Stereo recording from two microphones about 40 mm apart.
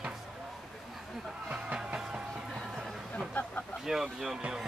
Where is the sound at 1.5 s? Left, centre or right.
Right.